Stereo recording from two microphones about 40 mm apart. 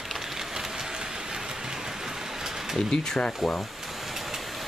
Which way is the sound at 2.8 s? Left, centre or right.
Centre.